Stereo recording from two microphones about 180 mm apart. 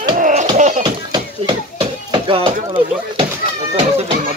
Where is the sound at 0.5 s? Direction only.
40° right (ahead or behind).